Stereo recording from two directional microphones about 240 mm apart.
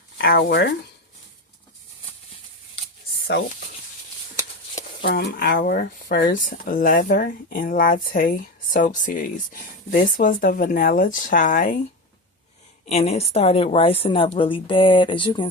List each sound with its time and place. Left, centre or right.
0.2 s speech: left
5.0 s speech: left
12.9 s speech: left